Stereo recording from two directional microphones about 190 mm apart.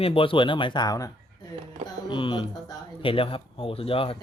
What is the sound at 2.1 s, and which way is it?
Speech, 25° left (ahead or behind).